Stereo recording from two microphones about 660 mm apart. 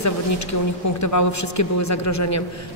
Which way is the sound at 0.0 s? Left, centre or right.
Left.